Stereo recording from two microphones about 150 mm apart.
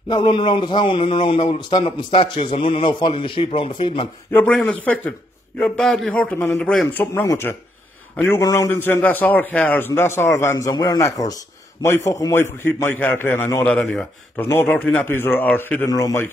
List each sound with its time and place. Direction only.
0.1 s a man's voice: 35° left (ahead or behind)
4.3 s a man's voice: 10° left (ahead or behind)